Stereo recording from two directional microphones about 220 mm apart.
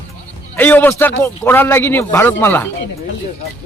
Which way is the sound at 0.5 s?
10° left (ahead or behind).